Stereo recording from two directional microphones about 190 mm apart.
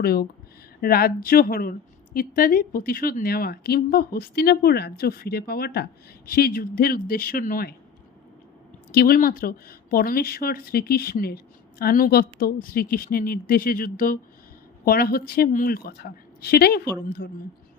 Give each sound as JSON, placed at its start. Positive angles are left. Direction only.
{"t": 0.0, "sound": "speech", "side_deg": 55}
{"t": 9.0, "sound": "a woman's voice", "side_deg": 50}